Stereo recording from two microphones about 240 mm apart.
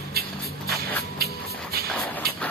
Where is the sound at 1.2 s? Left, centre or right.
Right.